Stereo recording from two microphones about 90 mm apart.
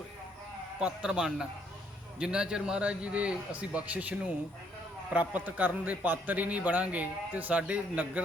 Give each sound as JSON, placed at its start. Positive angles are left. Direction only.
{"t": 0.8, "sound": "a man's voice", "side_deg": -10}
{"t": 5.3, "sound": "a man's voice", "side_deg": -20}